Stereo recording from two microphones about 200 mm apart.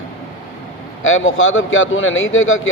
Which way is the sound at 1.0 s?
80° left.